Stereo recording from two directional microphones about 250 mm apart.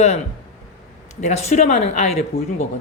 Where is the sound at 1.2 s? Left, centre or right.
Left.